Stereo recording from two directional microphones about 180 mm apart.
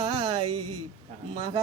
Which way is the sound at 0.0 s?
30° right (ahead or behind).